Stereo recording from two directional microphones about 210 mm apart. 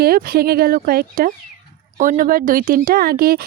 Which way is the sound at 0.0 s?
45° right (ahead or behind).